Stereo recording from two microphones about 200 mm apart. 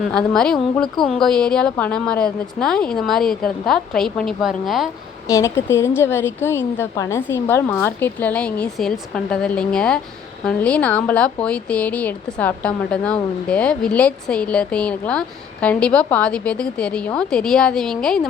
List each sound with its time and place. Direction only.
0.1 s a woman's voice: 5° left (ahead or behind)
5.3 s a woman's voice: 15° left (ahead or behind)